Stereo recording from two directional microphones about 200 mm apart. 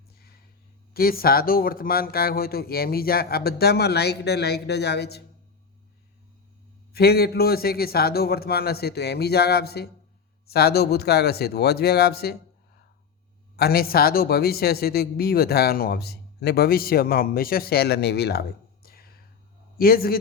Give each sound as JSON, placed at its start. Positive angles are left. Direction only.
{"t": 0.2, "sound": "a sound", "side_deg": 50}
{"t": 0.9, "sound": "speech", "side_deg": 50}
{"t": 6.9, "sound": "speech", "side_deg": 50}